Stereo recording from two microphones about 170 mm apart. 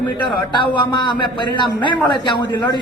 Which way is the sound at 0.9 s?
25° left (ahead or behind).